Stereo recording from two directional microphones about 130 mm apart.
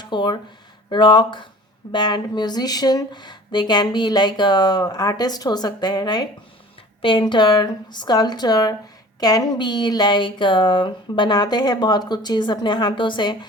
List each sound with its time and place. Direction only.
0.0 s speech: 35° left (ahead or behind)